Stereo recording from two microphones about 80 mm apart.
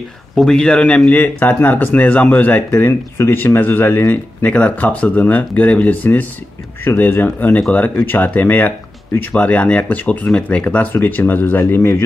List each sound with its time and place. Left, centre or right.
0.4 s speech: centre; by 12.0 s left